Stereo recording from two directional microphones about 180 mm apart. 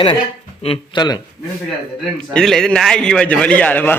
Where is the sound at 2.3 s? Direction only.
5° left (ahead or behind).